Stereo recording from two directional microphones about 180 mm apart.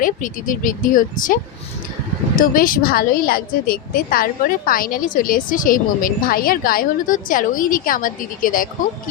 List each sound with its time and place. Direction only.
0.0 s a woman's voice: 50° left (ahead or behind)